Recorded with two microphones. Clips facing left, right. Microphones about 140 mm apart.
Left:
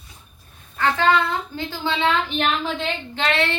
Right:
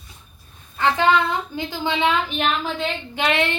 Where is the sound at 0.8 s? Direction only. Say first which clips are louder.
Right 1 dB; 15° right (ahead or behind).